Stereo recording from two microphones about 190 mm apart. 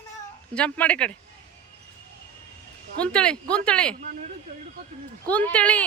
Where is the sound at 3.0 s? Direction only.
5° left (ahead or behind).